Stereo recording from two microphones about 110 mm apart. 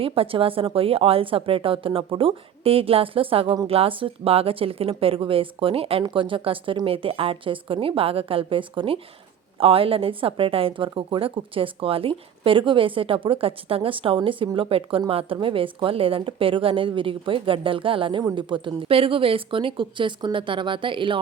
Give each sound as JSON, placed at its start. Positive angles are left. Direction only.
{"t": 0.0, "sound": "a woman's voice", "side_deg": -55}